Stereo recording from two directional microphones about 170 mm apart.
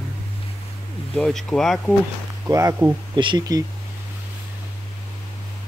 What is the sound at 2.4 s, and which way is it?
Speech, 20° right (ahead or behind).